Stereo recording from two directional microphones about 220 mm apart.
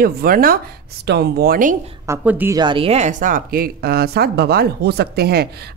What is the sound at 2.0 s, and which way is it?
A woman's voice, 10° right (ahead or behind).